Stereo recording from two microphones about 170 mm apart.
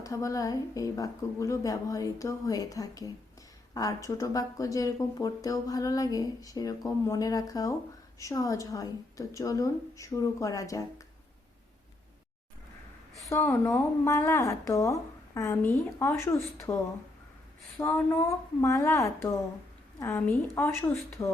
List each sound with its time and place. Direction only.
0.0 s speech: 20° left (ahead or behind)
13.3 s a woman's voice: 15° left (ahead or behind)
17.7 s a woman's voice: 15° left (ahead or behind)